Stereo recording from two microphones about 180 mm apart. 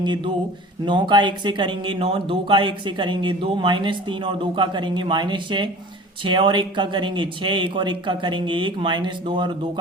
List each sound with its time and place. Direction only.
0.9 s speech: 25° right (ahead or behind)